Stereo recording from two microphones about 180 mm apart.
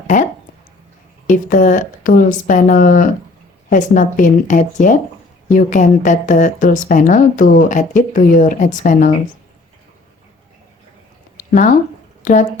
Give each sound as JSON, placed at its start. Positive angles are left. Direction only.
{"t": 0.1, "sound": "speech", "side_deg": 45}
{"t": 1.3, "sound": "speech", "side_deg": 45}
{"t": 12.2, "sound": "speech", "side_deg": 45}